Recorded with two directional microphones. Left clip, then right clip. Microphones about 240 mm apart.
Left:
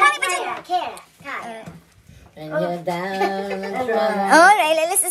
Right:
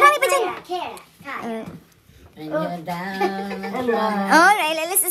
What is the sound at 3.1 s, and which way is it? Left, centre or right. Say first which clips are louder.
Music: even; left.